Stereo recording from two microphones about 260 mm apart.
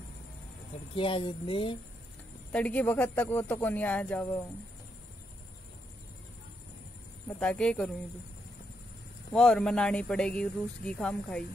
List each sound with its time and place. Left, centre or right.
0.9 s speech: centre
2.5 s speech: centre
7.2 s speech: centre
9.3 s speech: centre